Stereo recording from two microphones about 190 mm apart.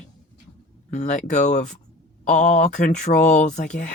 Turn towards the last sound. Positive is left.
turn(degrees=40)  # may be behind; listen again after turning